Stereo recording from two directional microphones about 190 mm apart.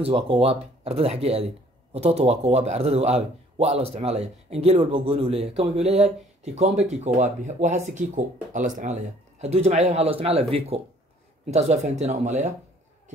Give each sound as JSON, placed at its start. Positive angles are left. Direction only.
{"t": 0.0, "sound": "speech", "side_deg": -30}
{"t": 5.9, "sound": "speech", "side_deg": 0}
{"t": 6.4, "sound": "speech", "side_deg": -35}